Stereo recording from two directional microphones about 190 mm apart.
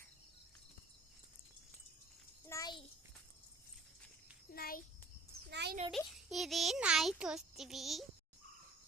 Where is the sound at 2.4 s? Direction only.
15° left (ahead or behind).